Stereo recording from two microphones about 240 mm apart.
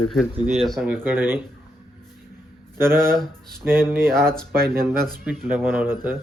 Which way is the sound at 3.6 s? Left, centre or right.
Centre.